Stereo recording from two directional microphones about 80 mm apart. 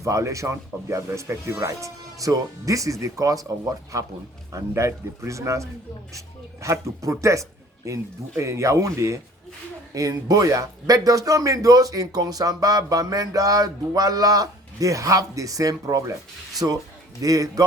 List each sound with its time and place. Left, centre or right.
0.0 s speech: right
4.5 s speech: right